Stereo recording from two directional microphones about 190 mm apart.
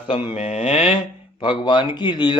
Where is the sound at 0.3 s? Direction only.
30° left (ahead or behind).